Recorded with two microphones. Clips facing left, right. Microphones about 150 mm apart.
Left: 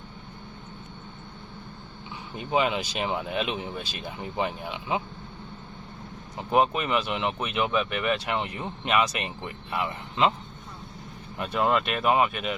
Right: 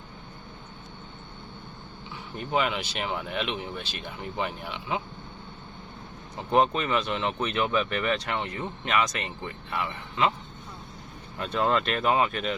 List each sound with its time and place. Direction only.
2.3 s speech: 15° left (ahead or behind)
6.5 s speech: 10° left (ahead or behind)
11.3 s speech: 10° left (ahead or behind)